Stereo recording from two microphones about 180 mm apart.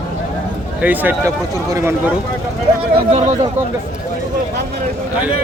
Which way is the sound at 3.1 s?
35° right (ahead or behind).